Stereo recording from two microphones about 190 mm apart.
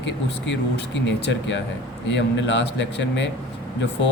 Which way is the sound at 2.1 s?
65° left (ahead or behind).